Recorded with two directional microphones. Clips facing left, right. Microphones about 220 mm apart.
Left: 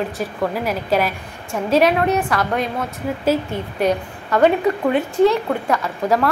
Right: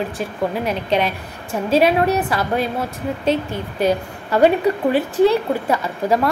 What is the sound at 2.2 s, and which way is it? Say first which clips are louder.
A woman's voice: right 1 dB; 5° right (ahead or behind).